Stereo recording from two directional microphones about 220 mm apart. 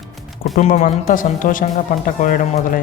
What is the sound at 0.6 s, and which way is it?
Speech, 35° left (ahead or behind).